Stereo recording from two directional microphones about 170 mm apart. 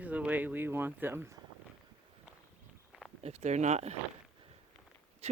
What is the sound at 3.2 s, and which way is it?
Speech, 40° right (ahead or behind).